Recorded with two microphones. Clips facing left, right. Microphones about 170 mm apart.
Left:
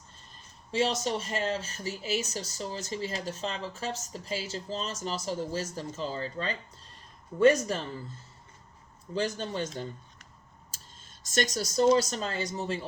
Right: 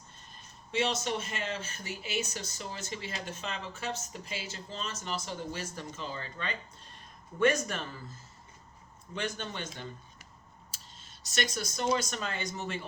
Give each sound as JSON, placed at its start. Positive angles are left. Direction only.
{"t": 0.7, "sound": "speech", "side_deg": 35}
{"t": 9.1, "sound": "speech", "side_deg": 35}
{"t": 11.3, "sound": "speech", "side_deg": 40}